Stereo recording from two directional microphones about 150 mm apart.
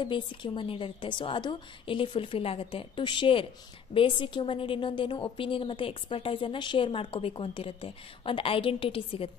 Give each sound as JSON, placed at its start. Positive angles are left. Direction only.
{"t": 0.0, "sound": "a woman's voice", "side_deg": 30}